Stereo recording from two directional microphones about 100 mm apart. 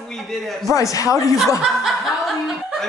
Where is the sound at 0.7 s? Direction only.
35° left (ahead or behind).